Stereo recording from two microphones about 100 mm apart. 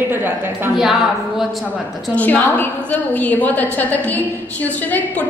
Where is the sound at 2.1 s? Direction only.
15° left (ahead or behind).